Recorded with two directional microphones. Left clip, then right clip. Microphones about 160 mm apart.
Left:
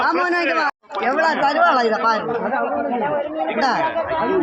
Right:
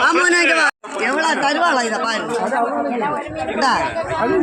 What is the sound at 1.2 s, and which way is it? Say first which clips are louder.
Speech: left 1 dB; 10° left (ahead or behind).